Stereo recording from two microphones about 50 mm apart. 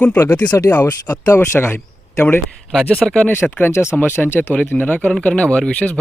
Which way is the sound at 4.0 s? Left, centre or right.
Left.